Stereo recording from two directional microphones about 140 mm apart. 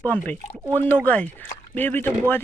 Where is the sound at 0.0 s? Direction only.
10° left (ahead or behind).